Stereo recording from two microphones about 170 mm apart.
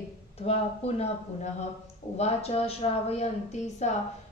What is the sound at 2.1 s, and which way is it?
A woman's voice, 40° left (ahead or behind).